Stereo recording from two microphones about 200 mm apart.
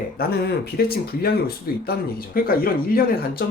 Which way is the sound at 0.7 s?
50° left (ahead or behind).